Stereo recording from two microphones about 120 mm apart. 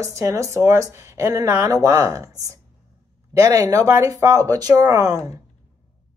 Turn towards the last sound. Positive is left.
turn(degrees=-30)  # may be behind; listen again after turning